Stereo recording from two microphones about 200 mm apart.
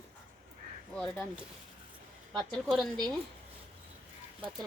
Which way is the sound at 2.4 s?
Centre (ahead or behind).